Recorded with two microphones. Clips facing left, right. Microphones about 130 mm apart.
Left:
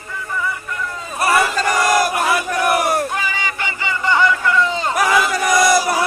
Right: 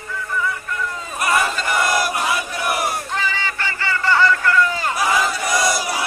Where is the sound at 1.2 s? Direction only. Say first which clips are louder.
Left 3 dB; 35° left (ahead or behind); by 3.0 s 55° left (ahead or behind).